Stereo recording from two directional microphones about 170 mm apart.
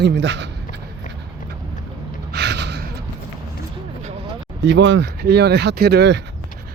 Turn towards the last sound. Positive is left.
turn(degrees=-85)